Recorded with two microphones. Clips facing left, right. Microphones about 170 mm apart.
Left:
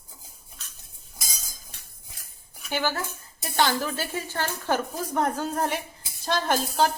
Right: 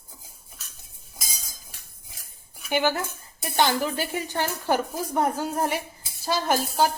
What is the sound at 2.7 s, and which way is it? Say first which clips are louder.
Speech: right 4 dB; 15° right (ahead or behind).